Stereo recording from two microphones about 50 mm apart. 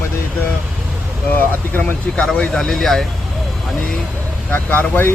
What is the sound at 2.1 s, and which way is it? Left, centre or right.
Speech, left.